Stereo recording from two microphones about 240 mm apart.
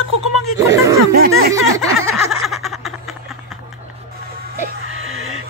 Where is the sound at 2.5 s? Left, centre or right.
Centre.